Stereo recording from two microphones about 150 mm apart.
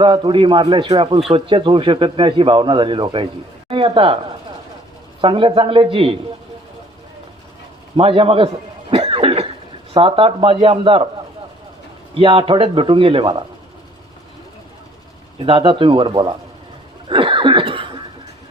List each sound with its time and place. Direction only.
0.0 s speech: 35° right (ahead or behind)
7.9 s speech: 40° right (ahead or behind)
8.9 s cough: 35° right (ahead or behind)
9.9 s speech: 35° right (ahead or behind)
12.1 s speech: 35° right (ahead or behind)
15.4 s speech: 35° right (ahead or behind)
17.1 s cough: 35° right (ahead or behind)